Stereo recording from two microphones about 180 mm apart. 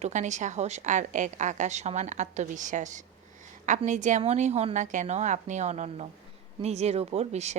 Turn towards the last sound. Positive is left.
turn(degrees=-40)  # may be behind; listen again after turning